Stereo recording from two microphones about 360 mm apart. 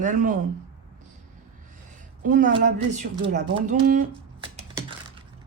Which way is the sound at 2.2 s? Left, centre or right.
Right.